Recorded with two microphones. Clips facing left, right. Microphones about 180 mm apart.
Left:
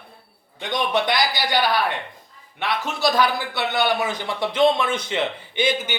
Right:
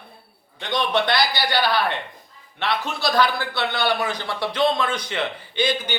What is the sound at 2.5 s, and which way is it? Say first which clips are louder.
A man's voice: even; 15° left (ahead or behind).